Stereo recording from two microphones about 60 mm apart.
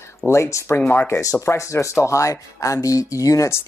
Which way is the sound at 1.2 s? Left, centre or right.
Left.